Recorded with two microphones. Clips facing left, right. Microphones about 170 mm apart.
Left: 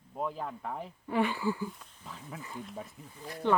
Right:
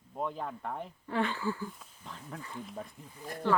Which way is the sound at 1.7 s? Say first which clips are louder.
Left 1 dB; centre (ahead or behind).